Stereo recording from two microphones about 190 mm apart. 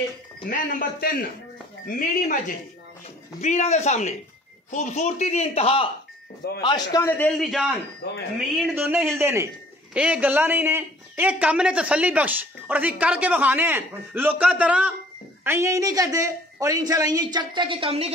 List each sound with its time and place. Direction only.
0.5 s a man's voice: 45° left (ahead or behind); by 7.7 s centre (ahead or behind)
8.0 s speech: 65° left (ahead or behind)
8.5 s a woman's voice: 5° right (ahead or behind); by 18.1 s 30° right (ahead or behind)